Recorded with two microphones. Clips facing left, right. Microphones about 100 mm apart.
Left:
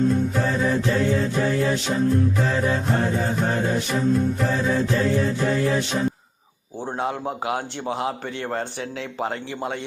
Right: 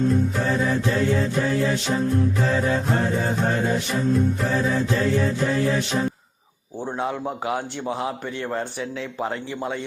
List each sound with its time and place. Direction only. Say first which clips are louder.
6.8 s a man's voice: even; 50° left (ahead or behind)
8.4 s speech: even; 60° left (ahead or behind)